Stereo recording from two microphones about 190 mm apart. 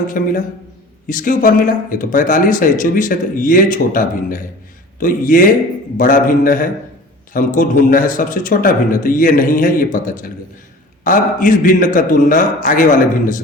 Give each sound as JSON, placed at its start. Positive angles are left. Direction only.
{"t": 0.2, "sound": "a man's voice", "side_deg": 45}